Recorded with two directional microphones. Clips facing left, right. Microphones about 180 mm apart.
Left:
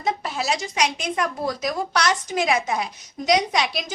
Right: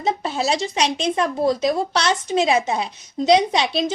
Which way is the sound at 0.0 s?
25° right (ahead or behind).